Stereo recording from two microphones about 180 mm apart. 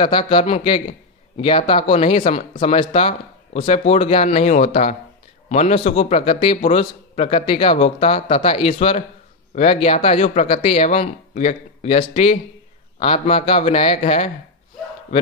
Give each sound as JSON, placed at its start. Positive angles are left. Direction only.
{"t": 0.0, "sound": "a man's voice", "side_deg": 30}